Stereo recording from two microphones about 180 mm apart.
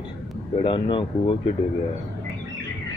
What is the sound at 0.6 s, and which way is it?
Speech, 30° left (ahead or behind).